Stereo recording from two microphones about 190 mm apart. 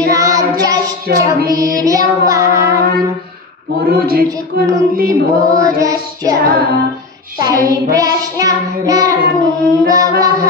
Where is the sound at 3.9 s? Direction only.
55° right (ahead or behind).